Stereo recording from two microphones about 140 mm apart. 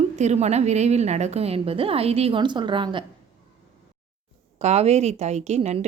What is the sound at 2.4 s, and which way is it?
Speech, 35° right (ahead or behind).